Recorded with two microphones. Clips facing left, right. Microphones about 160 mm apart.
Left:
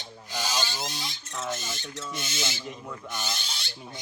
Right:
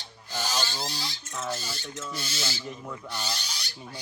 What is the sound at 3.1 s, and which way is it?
Owl, 20° left (ahead or behind).